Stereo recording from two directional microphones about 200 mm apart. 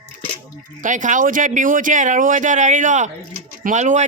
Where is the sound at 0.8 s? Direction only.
40° right (ahead or behind).